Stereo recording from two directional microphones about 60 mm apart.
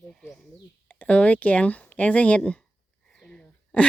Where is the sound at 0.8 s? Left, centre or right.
Left.